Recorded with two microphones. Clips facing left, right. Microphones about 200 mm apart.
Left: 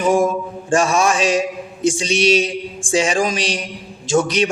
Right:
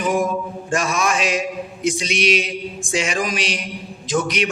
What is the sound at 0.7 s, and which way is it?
A man's voice, 30° left (ahead or behind).